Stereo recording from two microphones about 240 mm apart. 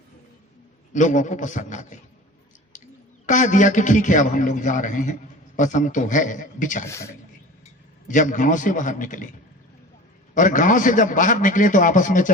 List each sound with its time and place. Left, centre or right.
0.9 s a man's voice: left
6.8 s a man's voice: centre
8.0 s a man's voice: left
10.3 s a man's voice: left